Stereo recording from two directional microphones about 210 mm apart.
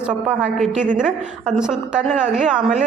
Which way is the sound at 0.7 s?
35° right (ahead or behind).